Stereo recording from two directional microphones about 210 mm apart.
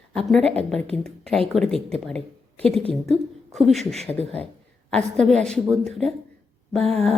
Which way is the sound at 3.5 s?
Centre (ahead or behind).